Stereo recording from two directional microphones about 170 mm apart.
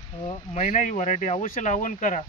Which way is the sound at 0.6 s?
45° left (ahead or behind).